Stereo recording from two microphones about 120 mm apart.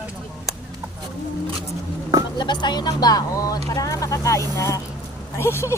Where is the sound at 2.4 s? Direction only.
40° left (ahead or behind).